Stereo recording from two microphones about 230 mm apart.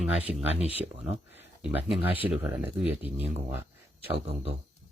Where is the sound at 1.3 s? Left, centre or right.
Centre.